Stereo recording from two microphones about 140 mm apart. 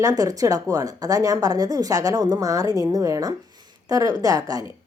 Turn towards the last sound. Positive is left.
turn(degrees=-25)  # may be behind; listen again after turning